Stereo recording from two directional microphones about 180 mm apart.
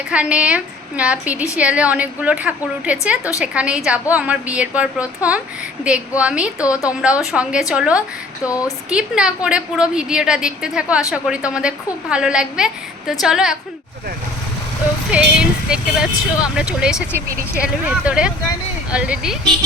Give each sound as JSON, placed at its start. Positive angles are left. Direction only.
{"t": 0.1, "sound": "a woman's voice", "side_deg": -5}
{"t": 6.6, "sound": "speech", "side_deg": 20}
{"t": 7.0, "sound": "a woman's voice", "side_deg": -5}
{"t": 15.1, "sound": "a woman's voice", "side_deg": -5}